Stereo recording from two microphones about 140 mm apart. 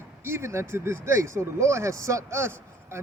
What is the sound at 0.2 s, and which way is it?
A man's voice, 15° right (ahead or behind).